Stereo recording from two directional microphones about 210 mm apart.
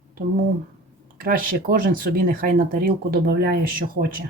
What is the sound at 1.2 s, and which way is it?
Speech, 40° right (ahead or behind).